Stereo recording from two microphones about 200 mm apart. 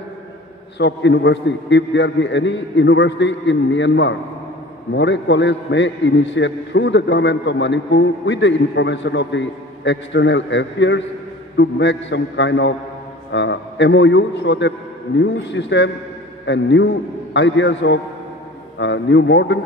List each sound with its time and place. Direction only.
0.7 s a man's voice: 60° left (ahead or behind)